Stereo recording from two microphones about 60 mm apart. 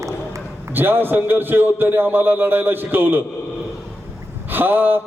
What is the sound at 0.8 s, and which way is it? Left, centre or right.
A man's voice, right.